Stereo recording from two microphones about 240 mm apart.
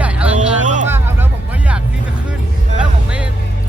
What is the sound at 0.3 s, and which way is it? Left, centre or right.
Vehicle, right.